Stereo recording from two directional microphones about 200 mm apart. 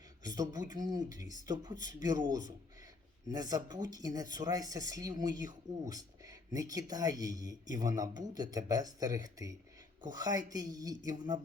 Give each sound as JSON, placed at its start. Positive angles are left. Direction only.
{"t": 0.2, "sound": "speech", "side_deg": -20}